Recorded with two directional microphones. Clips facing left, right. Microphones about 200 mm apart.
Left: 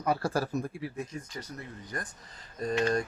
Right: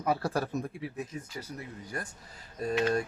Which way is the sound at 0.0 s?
Centre (ahead or behind).